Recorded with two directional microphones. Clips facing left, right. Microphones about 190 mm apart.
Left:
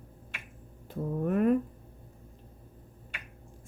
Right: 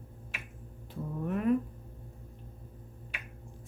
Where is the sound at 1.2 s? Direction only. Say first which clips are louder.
Left 3 dB; 50° left (ahead or behind).